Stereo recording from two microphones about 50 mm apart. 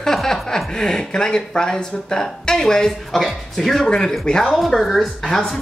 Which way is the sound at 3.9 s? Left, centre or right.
Centre.